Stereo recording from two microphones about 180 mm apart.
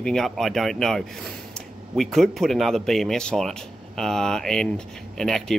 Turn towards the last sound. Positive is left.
turn(degrees=0)  # may be behind; listen again after turning